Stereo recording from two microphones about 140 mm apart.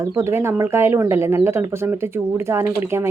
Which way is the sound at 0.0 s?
20° right (ahead or behind).